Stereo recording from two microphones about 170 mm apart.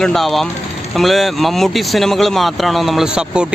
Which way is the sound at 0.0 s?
Centre (ahead or behind).